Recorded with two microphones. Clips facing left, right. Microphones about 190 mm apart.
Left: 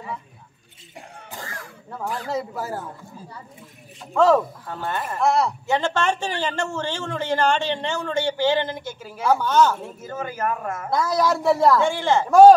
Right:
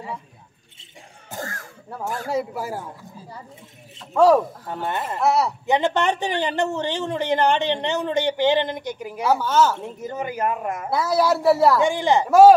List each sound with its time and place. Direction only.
1.3 s a sound: 45° right (ahead or behind)
2.2 s speech: 10° right (ahead or behind)
4.1 s speech: 10° right (ahead or behind)
5.2 s speech: 5° right (ahead or behind)
5.7 s speech: 15° right (ahead or behind)
9.3 s speech: 5° right (ahead or behind)
9.8 s speech: 20° right (ahead or behind)